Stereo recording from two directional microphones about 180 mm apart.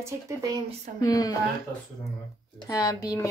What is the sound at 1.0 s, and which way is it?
Speech, 20° left (ahead or behind).